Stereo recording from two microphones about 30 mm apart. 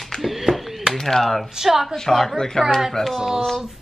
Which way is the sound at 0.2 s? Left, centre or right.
Centre.